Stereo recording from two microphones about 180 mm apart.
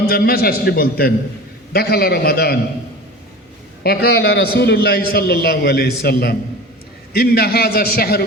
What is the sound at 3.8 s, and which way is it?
A man's voice, 65° left (ahead or behind).